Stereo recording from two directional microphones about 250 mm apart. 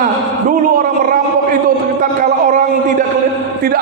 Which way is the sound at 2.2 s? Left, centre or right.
Right.